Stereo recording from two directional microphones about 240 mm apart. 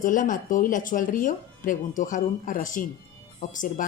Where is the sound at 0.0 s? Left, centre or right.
Left.